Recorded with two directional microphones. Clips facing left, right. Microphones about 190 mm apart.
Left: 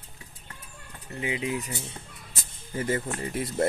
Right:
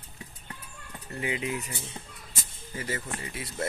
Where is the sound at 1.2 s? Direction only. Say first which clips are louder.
Left 1 dB; 20° left (ahead or behind).